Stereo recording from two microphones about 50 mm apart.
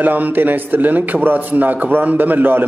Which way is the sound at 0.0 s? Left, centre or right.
Right.